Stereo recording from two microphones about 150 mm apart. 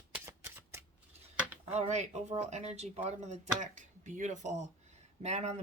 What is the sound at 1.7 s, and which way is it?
Speech, 50° right (ahead or behind).